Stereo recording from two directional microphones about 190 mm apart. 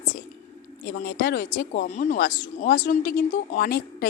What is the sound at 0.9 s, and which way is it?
Speech, 50° left (ahead or behind).